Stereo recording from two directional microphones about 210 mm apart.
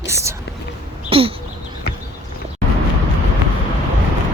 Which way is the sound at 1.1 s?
25° right (ahead or behind).